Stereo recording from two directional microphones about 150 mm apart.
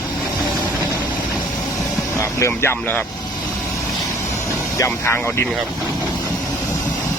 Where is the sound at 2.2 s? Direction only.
20° left (ahead or behind).